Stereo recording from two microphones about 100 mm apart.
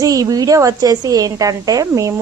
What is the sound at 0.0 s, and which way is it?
A woman's voice, 35° right (ahead or behind).